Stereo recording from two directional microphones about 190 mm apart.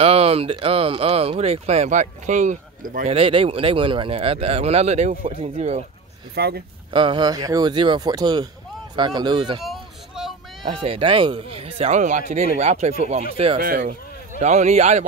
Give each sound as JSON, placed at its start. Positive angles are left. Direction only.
{"t": 0.0, "sound": "speech", "side_deg": -30}
{"t": 6.3, "sound": "speech", "side_deg": -55}
{"t": 6.9, "sound": "speech", "side_deg": -25}
{"t": 9.6, "sound": "a sound", "side_deg": 0}
{"t": 10.6, "sound": "speech", "side_deg": -30}
{"t": 13.6, "sound": "speech", "side_deg": -50}
{"t": 14.4, "sound": "speech", "side_deg": -35}